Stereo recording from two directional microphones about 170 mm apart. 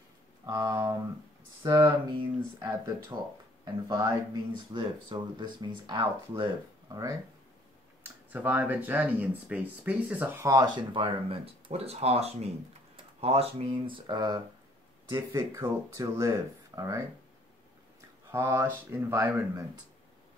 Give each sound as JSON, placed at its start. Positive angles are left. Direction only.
{"t": 0.5, "sound": "speech", "side_deg": -20}
{"t": 8.0, "sound": "speech", "side_deg": -10}
{"t": 18.3, "sound": "speech", "side_deg": -15}